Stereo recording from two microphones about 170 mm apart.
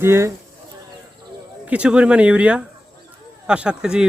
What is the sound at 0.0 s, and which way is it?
Speech, 15° right (ahead or behind).